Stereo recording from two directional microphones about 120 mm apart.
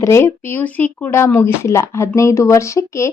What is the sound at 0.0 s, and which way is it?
Speech, 20° left (ahead or behind).